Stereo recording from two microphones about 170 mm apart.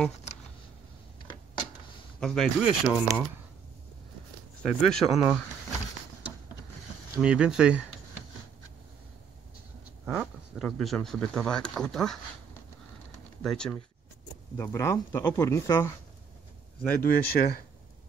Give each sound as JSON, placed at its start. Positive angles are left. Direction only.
{"t": 2.1, "sound": "speech", "side_deg": 5}
{"t": 4.6, "sound": "speech", "side_deg": 0}
{"t": 7.2, "sound": "speech", "side_deg": -5}
{"t": 10.0, "sound": "speech", "side_deg": -5}
{"t": 13.4, "sound": "speech", "side_deg": 5}
{"t": 14.6, "sound": "speech", "side_deg": 15}
{"t": 17.0, "sound": "speech", "side_deg": 65}